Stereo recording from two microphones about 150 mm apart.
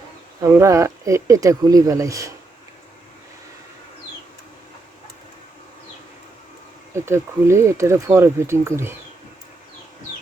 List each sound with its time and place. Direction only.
0.4 s speech: 20° right (ahead or behind)
7.0 s speech: 15° right (ahead or behind)